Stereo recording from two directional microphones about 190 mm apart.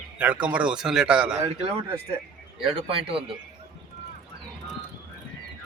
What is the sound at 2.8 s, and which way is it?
Speech, 30° right (ahead or behind).